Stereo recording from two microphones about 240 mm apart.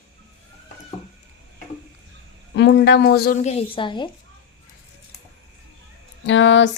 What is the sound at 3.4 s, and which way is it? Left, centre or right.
Speech, left.